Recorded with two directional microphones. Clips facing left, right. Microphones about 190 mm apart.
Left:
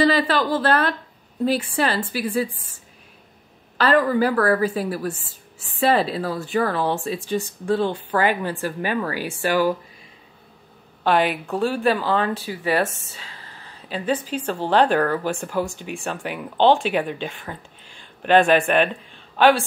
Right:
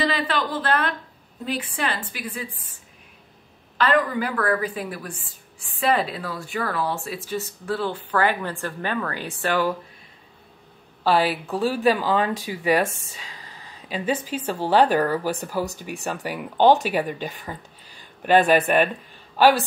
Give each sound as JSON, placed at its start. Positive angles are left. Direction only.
{"t": 0.0, "sound": "a woman's voice", "side_deg": 35}
{"t": 3.7, "sound": "a woman's voice", "side_deg": 35}
{"t": 7.9, "sound": "speech", "side_deg": 10}
{"t": 11.6, "sound": "a woman's voice", "side_deg": -10}